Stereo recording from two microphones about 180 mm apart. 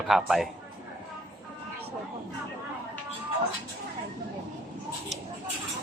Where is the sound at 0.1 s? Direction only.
Centre (ahead or behind).